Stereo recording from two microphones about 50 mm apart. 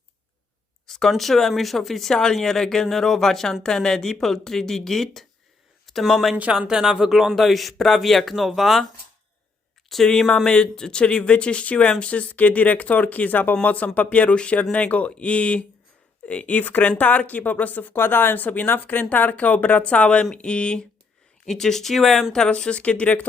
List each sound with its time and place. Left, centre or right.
0.9 s speech: centre
6.5 s speech: centre
10.1 s speech: centre; by 17.9 s left
17.9 s speech: left; by 20.8 s centre
21.4 s speech: centre
22.4 s speech: left